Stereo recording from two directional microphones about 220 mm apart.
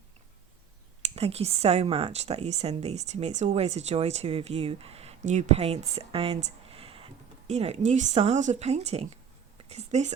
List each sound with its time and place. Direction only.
1.0 s speech: 25° right (ahead or behind)